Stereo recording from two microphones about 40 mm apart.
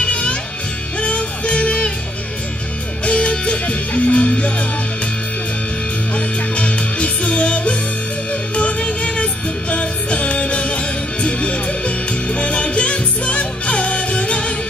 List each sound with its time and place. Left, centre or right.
0.0 s music: left
3.1 s music: left
6.1 s music: left